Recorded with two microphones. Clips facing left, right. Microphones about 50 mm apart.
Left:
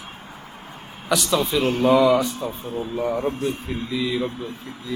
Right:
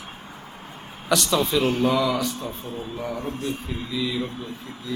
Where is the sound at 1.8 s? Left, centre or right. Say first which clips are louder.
Left 5 dB; left.